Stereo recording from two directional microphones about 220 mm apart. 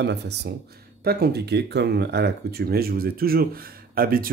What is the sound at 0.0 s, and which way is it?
Speech, 50° right (ahead or behind).